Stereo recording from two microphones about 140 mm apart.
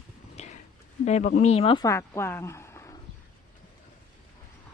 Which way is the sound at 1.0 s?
55° left (ahead or behind).